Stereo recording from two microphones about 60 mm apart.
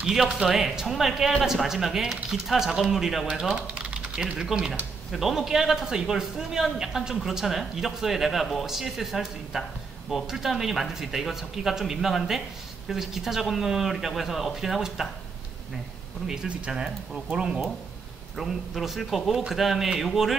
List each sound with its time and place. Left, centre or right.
0.0 s a man's voice: centre
16.3 s speech: centre
18.3 s a man's voice: centre